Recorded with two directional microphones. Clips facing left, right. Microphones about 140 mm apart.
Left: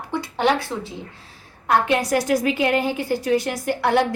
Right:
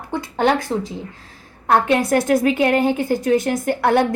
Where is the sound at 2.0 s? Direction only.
55° right (ahead or behind).